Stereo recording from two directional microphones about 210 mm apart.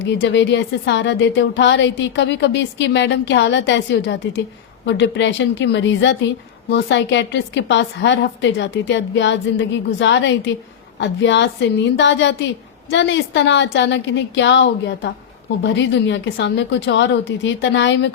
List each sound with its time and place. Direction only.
0.1 s speech: 60° left (ahead or behind)